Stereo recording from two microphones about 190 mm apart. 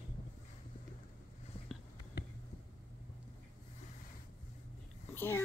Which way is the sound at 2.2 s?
60° left (ahead or behind).